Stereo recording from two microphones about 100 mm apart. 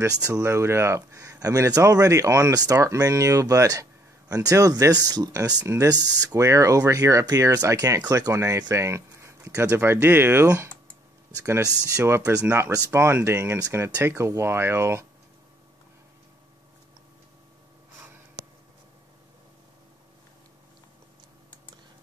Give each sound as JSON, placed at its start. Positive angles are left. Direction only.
{"t": 0.0, "sound": "speech", "side_deg": -35}